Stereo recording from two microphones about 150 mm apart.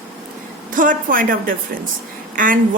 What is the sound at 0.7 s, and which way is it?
A woman's voice, 65° right (ahead or behind).